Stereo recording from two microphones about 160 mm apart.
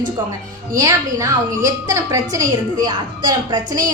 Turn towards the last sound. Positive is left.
turn(degrees=-25)  # may be behind; listen again after turning